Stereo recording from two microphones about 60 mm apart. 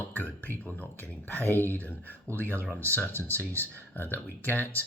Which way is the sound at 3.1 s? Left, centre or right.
Right.